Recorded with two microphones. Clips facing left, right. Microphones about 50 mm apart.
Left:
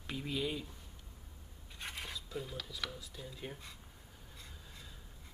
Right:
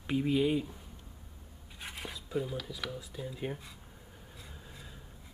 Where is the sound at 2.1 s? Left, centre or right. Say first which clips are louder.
Right 8 dB; centre.